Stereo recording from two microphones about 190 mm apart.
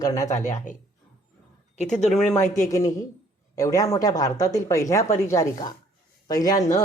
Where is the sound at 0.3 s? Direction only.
40° left (ahead or behind).